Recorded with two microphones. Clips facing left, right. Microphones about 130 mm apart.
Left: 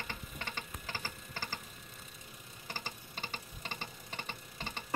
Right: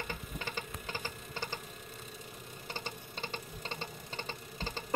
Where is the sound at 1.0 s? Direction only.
20° right (ahead or behind).